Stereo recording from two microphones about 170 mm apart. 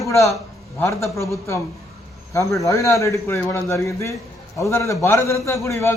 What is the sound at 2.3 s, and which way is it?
A man's voice, 20° left (ahead or behind).